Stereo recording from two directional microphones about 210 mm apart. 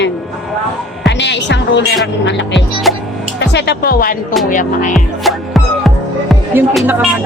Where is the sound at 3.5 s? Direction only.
55° left (ahead or behind); by 4.9 s 40° left (ahead or behind).